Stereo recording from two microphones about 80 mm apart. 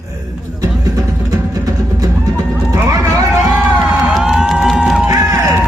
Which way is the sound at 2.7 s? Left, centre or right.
Right.